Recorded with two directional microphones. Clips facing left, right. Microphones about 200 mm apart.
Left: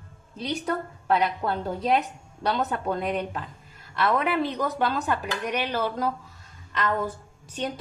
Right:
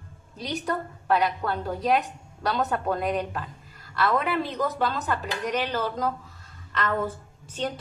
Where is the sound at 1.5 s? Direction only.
25° left (ahead or behind).